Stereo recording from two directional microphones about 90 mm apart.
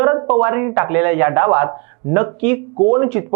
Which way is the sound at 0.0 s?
20° right (ahead or behind).